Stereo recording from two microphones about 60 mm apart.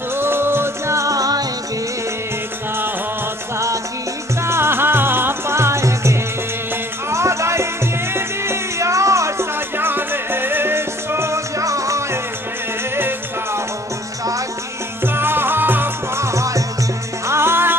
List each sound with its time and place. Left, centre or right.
0.2 s music: right
3.5 s music: right
4.4 s music: right
9.8 s music: right
15.1 s music: right
16.2 s music: right
17.3 s music: right